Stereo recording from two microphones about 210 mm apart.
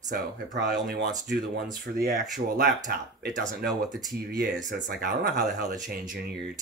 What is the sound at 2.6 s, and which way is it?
Speech, 40° right (ahead or behind).